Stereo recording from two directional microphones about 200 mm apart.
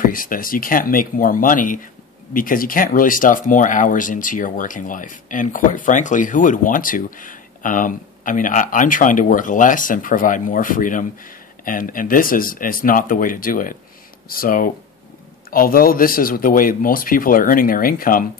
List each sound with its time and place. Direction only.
0.0 s speech: 45° left (ahead or behind)